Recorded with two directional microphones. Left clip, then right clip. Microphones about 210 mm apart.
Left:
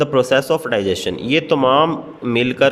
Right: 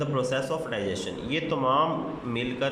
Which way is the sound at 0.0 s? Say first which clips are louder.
Left 12 dB; 55° left (ahead or behind).